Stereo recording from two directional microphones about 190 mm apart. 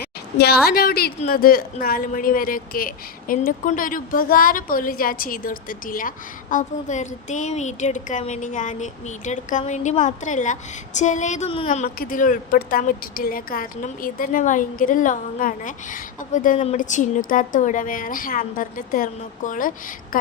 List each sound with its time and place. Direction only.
0.3 s a woman's voice: 55° left (ahead or behind); by 11.9 s 35° left (ahead or behind)
11.9 s a woman's voice: 45° left (ahead or behind)